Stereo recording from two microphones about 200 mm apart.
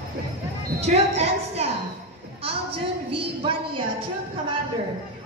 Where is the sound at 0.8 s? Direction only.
30° right (ahead or behind).